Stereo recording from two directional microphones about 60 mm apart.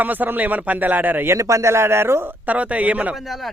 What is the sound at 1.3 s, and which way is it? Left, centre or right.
Speech, right.